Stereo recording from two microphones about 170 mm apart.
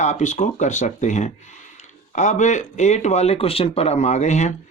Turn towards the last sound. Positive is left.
turn(degrees=45)  # may be behind; listen again after turning